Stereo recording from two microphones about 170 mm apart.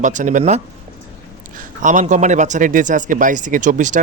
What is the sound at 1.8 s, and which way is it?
A man's voice, 45° right (ahead or behind).